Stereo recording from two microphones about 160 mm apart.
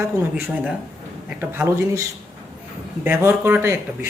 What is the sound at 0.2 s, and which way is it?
Speech, 10° right (ahead or behind).